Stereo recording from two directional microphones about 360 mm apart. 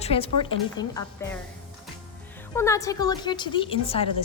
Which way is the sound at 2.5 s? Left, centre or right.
Centre.